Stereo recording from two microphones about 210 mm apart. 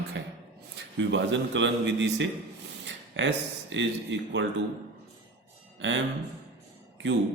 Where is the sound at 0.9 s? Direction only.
60° right (ahead or behind).